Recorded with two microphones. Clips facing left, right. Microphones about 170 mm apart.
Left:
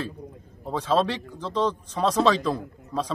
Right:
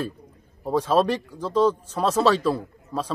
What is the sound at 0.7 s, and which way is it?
A man's voice, 10° right (ahead or behind).